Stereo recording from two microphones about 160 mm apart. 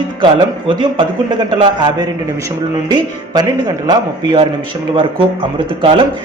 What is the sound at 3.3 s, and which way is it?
Speech, 25° right (ahead or behind).